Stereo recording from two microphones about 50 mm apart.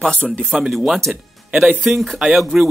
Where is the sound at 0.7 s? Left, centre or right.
Centre.